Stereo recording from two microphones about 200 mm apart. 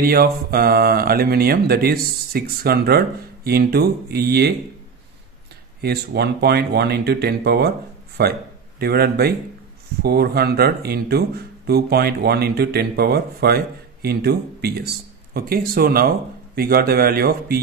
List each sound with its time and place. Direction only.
0.0 s speech: 50° right (ahead or behind)
5.8 s speech: 55° right (ahead or behind)